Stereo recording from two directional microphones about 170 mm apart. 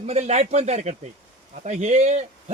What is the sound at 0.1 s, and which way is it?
A man's voice, 40° right (ahead or behind).